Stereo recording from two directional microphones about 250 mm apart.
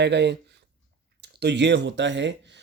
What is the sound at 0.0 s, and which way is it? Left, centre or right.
Speech, right.